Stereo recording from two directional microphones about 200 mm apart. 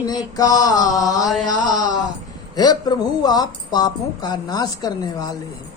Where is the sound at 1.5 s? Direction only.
20° left (ahead or behind).